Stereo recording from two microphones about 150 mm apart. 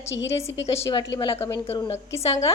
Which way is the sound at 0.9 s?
30° left (ahead or behind).